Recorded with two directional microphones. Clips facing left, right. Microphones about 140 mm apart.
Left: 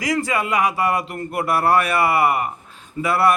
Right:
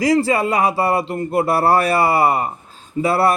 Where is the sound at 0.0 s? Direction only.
30° right (ahead or behind).